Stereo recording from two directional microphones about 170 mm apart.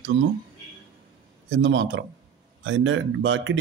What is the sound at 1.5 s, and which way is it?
Speech, 90° right.